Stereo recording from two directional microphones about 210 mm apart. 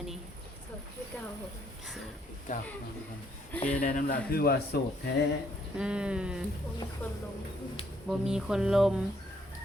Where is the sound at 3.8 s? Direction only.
40° left (ahead or behind).